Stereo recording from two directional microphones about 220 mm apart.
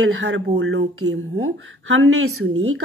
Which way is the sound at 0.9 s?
70° right (ahead or behind).